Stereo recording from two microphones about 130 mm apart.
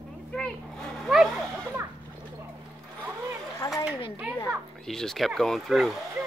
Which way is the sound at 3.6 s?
20° left (ahead or behind).